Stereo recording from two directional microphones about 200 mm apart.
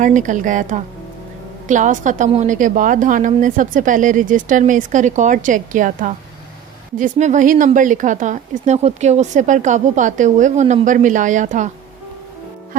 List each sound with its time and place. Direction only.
0.0 s speech: 40° right (ahead or behind)